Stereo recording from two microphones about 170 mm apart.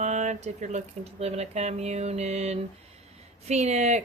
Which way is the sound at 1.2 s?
40° right (ahead or behind).